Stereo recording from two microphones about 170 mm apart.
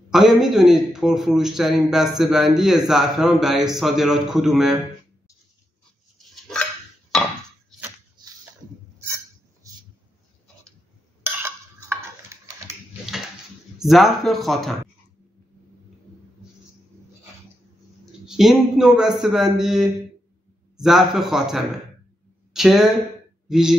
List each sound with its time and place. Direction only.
0.1 s a man's voice: centre (ahead or behind)
6.1 s dog: centre (ahead or behind)
9.6 s a sound: 20° right (ahead or behind)
11.4 s a sound: 15° right (ahead or behind)
13.7 s a man's voice: centre (ahead or behind)
18.2 s a man's voice: 5° right (ahead or behind)